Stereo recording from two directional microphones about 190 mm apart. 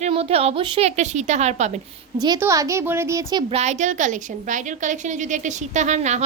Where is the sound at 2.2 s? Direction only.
20° right (ahead or behind).